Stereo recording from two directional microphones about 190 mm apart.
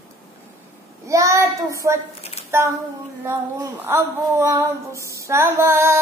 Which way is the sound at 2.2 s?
35° left (ahead or behind).